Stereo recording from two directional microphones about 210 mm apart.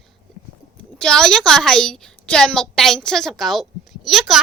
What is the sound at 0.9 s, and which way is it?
A child's voice, 5° left (ahead or behind).